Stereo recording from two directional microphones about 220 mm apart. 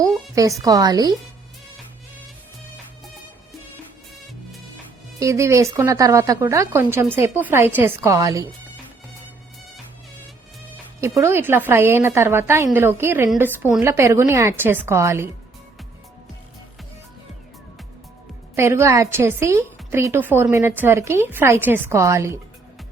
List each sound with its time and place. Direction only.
0.0 s a sound: 15° right (ahead or behind)
0.6 s a woman's voice: 15° right (ahead or behind)
5.2 s a woman's voice: 15° right (ahead or behind)
11.0 s a woman's voice: 15° right (ahead or behind)
18.5 s a woman's voice: 10° right (ahead or behind)